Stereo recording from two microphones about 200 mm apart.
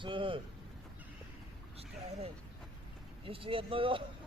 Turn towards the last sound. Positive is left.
turn(degrees=-25)  # may be behind; listen again after turning